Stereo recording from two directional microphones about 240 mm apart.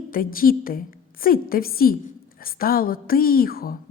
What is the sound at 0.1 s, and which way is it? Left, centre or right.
A woman's voice, left.